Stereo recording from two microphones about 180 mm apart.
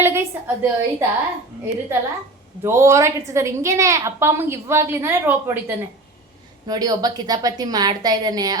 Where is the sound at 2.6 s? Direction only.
15° right (ahead or behind).